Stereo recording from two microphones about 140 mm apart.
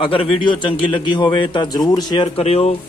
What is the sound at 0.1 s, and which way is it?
Speech, 40° left (ahead or behind).